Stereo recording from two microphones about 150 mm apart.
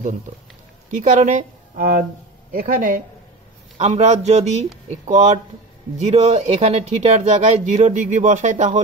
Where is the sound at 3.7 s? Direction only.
45° right (ahead or behind).